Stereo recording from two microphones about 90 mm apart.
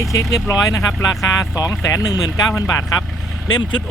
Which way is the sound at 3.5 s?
50° left (ahead or behind).